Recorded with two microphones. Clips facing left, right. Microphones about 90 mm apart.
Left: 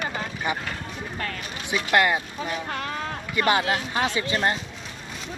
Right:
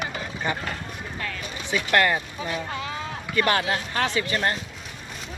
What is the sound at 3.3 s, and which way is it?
Speech, 15° left (ahead or behind).